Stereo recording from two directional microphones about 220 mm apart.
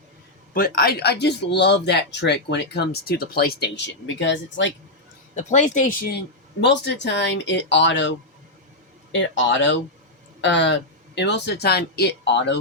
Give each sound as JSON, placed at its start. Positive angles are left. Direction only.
{"t": 0.5, "sound": "speech", "side_deg": 40}
{"t": 5.3, "sound": "a woman's voice", "side_deg": 30}
{"t": 6.6, "sound": "speech", "side_deg": 50}
{"t": 9.1, "sound": "speech", "side_deg": 55}